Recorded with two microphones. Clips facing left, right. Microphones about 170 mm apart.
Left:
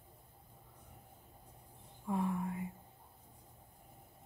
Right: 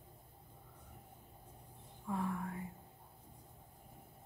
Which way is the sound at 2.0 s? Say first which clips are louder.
Left 3 dB; 15° left (ahead or behind).